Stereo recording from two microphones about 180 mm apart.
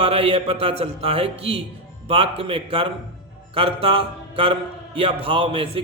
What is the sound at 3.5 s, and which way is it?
Mantra, 30° right (ahead or behind).